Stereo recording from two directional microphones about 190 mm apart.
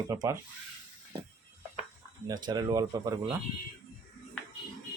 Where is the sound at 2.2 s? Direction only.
20° right (ahead or behind).